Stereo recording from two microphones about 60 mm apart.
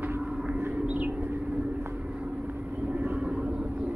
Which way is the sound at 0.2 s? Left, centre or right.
Centre.